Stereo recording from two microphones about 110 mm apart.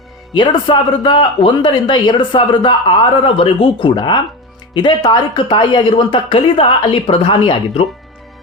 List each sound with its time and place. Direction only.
0.3 s a man's voice: 45° left (ahead or behind)